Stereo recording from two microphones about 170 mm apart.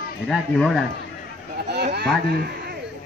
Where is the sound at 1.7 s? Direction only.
75° right (ahead or behind).